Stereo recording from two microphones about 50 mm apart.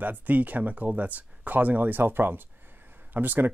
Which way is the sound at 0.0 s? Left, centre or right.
Right.